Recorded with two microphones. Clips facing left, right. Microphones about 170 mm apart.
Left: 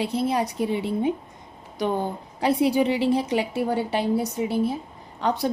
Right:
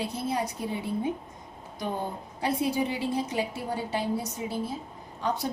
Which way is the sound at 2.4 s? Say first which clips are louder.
Left 7 dB; 80° left.